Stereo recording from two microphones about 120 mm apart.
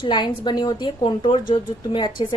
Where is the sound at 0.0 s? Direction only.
40° left (ahead or behind).